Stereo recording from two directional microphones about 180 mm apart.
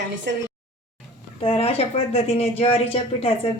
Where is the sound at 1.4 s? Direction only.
35° left (ahead or behind).